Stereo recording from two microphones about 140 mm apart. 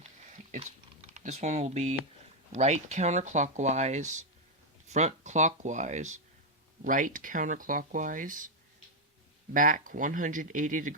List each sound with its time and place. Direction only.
1.0 s speech: 60° right (ahead or behind)
6.8 s speech: 70° right (ahead or behind)
9.5 s speech: 75° right (ahead or behind)